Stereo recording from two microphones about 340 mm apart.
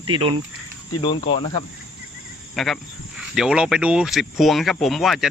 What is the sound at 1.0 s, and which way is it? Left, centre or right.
Speech, centre.